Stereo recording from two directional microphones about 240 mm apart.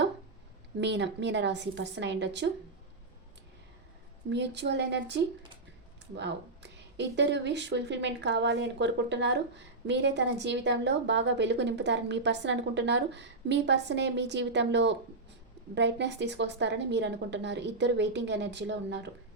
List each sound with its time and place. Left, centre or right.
0.8 s a woman's voice: right
4.3 s a woman's voice: right